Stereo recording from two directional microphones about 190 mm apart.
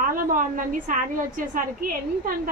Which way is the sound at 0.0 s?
45° right (ahead or behind).